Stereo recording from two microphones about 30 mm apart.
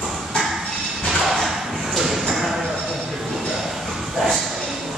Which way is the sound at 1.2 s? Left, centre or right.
Centre.